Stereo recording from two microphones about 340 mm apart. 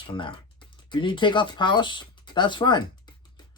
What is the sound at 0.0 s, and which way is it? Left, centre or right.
Speech, centre.